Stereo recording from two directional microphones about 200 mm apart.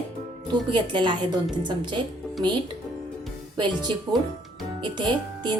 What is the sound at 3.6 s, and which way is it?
A woman's voice, 20° right (ahead or behind).